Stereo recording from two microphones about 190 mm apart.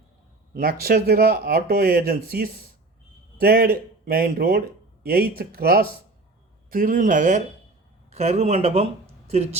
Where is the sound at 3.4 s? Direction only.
50° right (ahead or behind).